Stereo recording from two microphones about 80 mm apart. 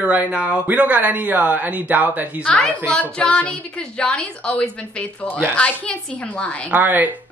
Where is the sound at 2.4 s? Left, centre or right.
Centre.